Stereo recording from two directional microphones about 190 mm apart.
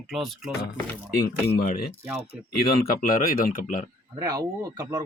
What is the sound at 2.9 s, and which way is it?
Speech, 50° left (ahead or behind).